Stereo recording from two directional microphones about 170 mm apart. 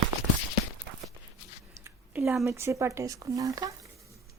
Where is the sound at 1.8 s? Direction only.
15° right (ahead or behind).